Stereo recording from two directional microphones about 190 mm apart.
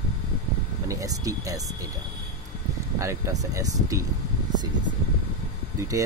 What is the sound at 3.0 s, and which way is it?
Speech, 15° right (ahead or behind).